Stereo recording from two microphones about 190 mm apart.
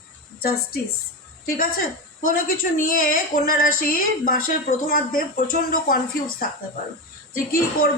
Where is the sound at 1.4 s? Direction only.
50° left (ahead or behind).